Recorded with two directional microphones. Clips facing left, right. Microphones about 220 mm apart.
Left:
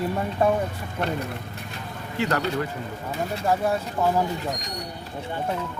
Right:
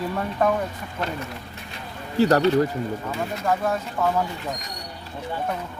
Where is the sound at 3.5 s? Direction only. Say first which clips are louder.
Left 1 dB; 15° left (ahead or behind).